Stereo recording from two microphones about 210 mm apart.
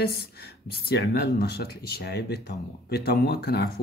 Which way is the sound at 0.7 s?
50° left (ahead or behind).